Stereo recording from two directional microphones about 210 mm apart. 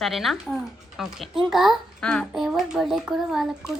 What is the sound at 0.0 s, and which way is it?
A child's voice, centre (ahead or behind).